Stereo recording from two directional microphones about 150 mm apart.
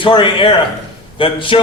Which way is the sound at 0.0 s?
35° left (ahead or behind).